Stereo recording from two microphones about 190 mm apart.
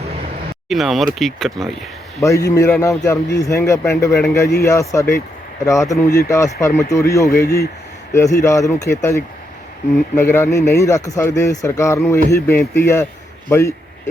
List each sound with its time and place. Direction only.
0.7 s speech: centre (ahead or behind)
2.2 s speech: 15° left (ahead or behind)
10.2 s speech: 10° left (ahead or behind)